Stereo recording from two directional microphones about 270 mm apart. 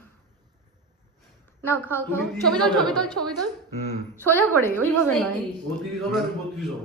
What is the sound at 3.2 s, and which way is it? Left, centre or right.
Speech, right.